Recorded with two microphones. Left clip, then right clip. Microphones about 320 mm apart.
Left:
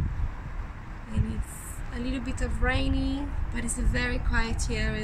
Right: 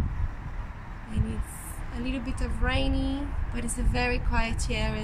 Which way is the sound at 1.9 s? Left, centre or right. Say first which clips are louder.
Even; centre.